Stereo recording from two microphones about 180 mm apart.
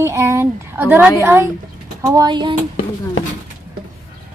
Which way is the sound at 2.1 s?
20° right (ahead or behind).